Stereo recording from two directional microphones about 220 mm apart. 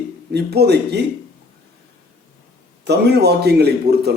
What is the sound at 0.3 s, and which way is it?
Speech, 50° right (ahead or behind).